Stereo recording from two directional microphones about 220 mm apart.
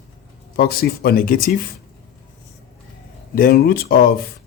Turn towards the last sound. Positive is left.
turn(degrees=40)  # may be behind; listen again after turning